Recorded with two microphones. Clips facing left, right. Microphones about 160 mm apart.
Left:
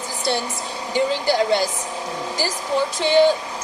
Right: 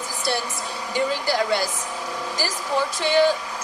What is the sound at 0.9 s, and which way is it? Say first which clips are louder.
Speech: left 4 dB; 20° left (ahead or behind).